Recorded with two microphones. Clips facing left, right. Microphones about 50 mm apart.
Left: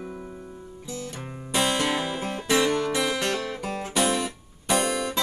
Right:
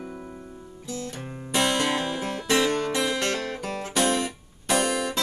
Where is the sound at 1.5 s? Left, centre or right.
Centre.